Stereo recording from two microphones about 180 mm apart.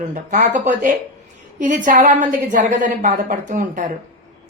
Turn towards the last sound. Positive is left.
turn(degrees=-45)  # may be behind; listen again after turning